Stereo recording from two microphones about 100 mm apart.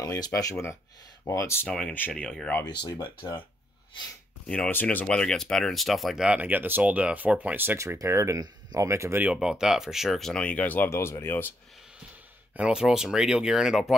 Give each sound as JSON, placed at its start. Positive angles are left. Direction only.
{"t": 0.3, "sound": "speech", "side_deg": 30}
{"t": 1.7, "sound": "speech", "side_deg": 10}
{"t": 2.6, "sound": "speech", "side_deg": 50}
{"t": 4.6, "sound": "speech", "side_deg": 20}
{"t": 9.2, "sound": "speech", "side_deg": -10}
{"t": 12.5, "sound": "speech", "side_deg": -10}